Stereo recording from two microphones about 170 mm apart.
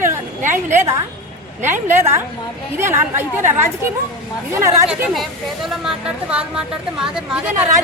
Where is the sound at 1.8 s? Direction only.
15° right (ahead or behind).